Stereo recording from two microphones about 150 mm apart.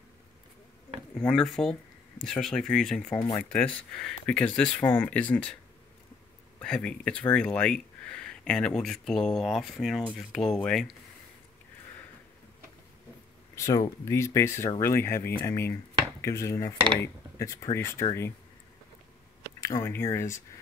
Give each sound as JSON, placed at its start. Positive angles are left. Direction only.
{"t": 1.1, "sound": "speech", "side_deg": 5}
{"t": 6.6, "sound": "speech", "side_deg": 5}
{"t": 13.6, "sound": "speech", "side_deg": 20}
{"t": 19.6, "sound": "speech", "side_deg": 20}